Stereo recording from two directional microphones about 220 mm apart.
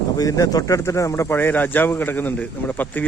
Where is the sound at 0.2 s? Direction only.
15° left (ahead or behind).